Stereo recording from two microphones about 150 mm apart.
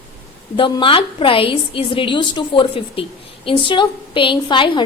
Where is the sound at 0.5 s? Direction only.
35° left (ahead or behind).